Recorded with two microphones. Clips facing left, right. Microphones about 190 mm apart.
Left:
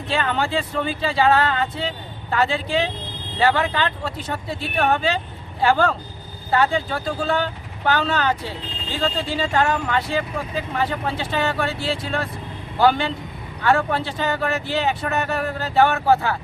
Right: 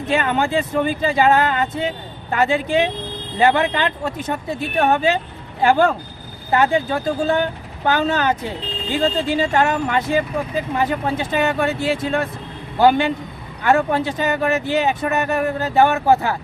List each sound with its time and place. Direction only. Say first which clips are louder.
0.0 s speech: right 4 dB; 20° right (ahead or behind)